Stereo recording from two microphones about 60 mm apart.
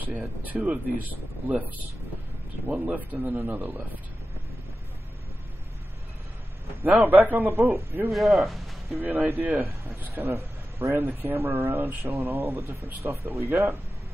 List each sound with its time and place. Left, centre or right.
0.5 s a man's voice: right
6.8 s a man's voice: right
8.1 s speech: centre
9.0 s a man's voice: right
11.1 s a man's voice: right
12.1 s speech: right